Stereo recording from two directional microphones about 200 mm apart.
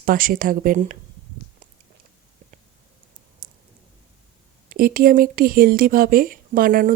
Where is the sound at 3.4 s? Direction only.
45° right (ahead or behind).